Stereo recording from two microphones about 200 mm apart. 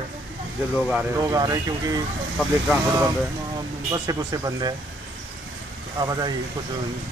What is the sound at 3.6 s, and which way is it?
Speech, 20° right (ahead or behind).